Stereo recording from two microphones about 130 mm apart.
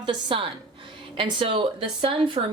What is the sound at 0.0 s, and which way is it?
A woman's voice, 40° right (ahead or behind).